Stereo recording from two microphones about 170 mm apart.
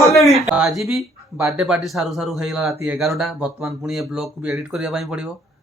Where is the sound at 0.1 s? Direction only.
Centre (ahead or behind).